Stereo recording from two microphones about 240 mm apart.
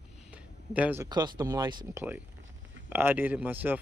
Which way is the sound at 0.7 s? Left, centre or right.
Centre.